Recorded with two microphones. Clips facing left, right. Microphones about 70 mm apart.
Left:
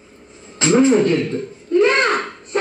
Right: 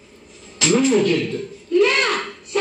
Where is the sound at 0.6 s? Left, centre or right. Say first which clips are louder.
Left 3 dB; left.